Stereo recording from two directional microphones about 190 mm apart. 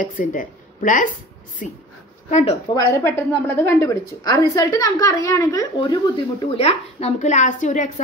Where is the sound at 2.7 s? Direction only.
15° left (ahead or behind).